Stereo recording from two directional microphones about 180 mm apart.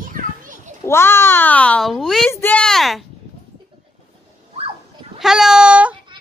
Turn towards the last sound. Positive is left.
turn(degrees=-5)  # may be behind; listen again after turning